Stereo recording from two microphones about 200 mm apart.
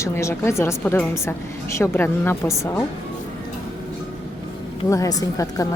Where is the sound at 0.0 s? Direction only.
15° left (ahead or behind).